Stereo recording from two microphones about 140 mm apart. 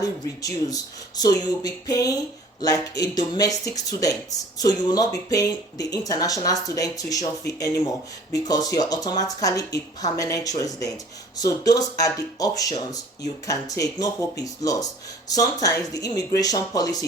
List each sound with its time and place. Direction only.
0.0 s speech: 25° left (ahead or behind)